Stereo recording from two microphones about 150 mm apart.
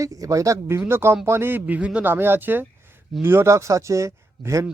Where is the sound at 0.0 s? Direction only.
20° right (ahead or behind).